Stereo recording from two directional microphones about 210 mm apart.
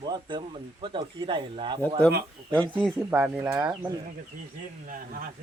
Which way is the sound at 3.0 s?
5° right (ahead or behind).